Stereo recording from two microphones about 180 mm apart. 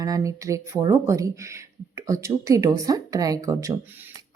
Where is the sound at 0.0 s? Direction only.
20° right (ahead or behind).